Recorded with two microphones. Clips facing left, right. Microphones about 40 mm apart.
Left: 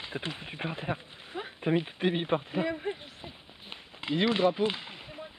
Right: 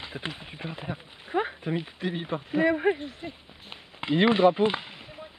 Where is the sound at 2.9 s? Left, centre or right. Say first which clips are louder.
Right 8 dB; centre.